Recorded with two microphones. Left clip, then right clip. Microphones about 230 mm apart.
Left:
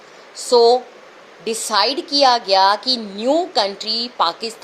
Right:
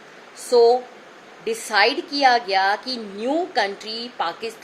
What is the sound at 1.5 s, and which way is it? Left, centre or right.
Speech, left.